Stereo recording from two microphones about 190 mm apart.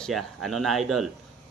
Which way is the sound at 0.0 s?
Centre (ahead or behind).